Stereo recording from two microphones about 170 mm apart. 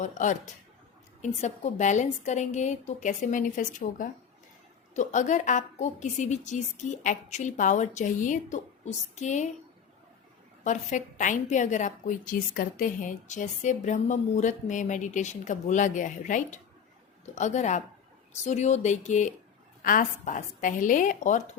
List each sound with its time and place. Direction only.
0.0 s a woman's voice: 45° left (ahead or behind)
10.6 s a woman's voice: 45° left (ahead or behind)